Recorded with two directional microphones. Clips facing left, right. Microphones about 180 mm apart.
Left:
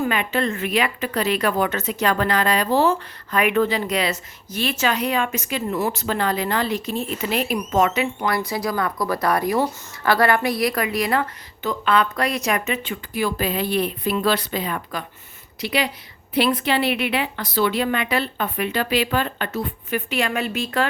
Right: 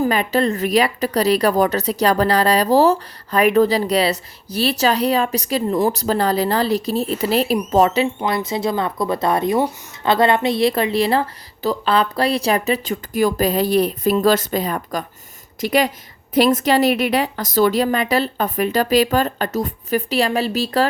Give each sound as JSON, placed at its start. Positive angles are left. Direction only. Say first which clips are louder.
{"t": 0.0, "sound": "a woman's voice", "louder": "right 5 dB", "side_deg": -35}